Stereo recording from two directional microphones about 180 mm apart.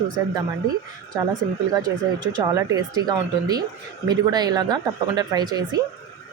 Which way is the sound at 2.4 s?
20° right (ahead or behind).